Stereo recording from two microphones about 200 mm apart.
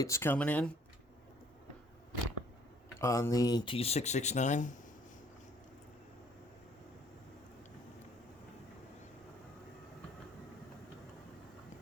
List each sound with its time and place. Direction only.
0.0 s speech: 15° left (ahead or behind)
3.0 s speech: 15° left (ahead or behind); by 4.7 s 35° left (ahead or behind)